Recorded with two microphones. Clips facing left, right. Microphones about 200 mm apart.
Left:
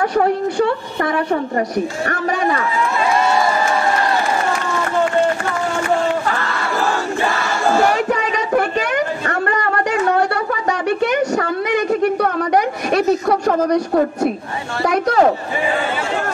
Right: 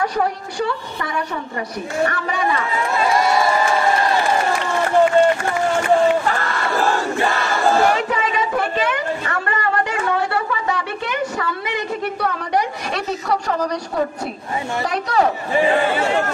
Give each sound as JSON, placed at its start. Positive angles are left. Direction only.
{"t": 0.1, "sound": "a woman's voice", "side_deg": 55}
{"t": 8.1, "sound": "a sound", "side_deg": 45}
{"t": 14.9, "sound": "a woman's voice", "side_deg": 45}